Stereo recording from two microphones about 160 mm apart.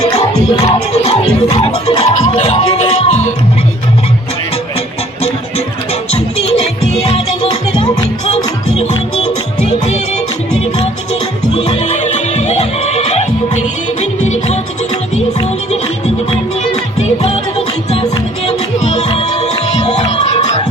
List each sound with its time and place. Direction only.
0.6 s music: 40° left (ahead or behind)
5.2 s music: 40° left (ahead or behind)
9.6 s music: 45° left (ahead or behind)
11.5 s music: 40° left (ahead or behind)
18.4 s music: 45° left (ahead or behind)